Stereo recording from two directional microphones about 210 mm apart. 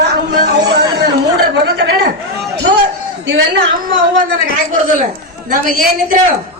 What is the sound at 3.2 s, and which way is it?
Speech, 60° right (ahead or behind).